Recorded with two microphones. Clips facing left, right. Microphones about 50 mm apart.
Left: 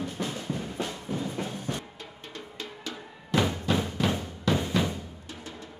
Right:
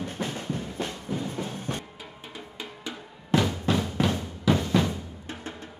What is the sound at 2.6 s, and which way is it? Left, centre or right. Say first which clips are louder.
Music: right 1 dB; centre.